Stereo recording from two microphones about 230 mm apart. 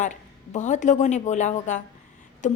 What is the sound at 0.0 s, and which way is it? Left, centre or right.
A woman's voice, left.